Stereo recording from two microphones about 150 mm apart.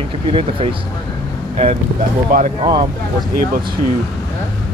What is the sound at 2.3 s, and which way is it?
Speech, 65° right (ahead or behind).